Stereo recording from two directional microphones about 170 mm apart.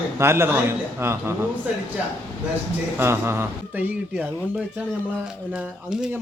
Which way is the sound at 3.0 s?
15° right (ahead or behind).